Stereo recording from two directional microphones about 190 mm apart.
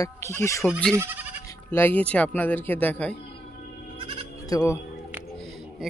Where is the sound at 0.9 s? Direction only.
10° right (ahead or behind).